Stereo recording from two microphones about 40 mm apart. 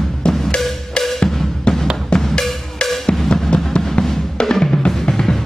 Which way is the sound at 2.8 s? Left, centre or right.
Left.